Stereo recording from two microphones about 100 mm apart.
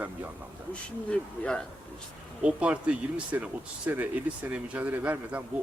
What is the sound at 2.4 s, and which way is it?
Speech, 10° right (ahead or behind).